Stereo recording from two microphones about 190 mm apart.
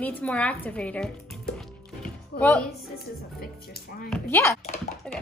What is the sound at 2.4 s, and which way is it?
Speech, 10° left (ahead or behind).